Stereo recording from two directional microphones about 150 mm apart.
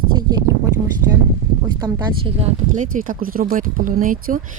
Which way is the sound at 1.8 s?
35° right (ahead or behind).